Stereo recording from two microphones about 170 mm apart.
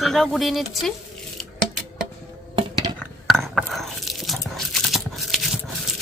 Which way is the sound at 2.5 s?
25° right (ahead or behind).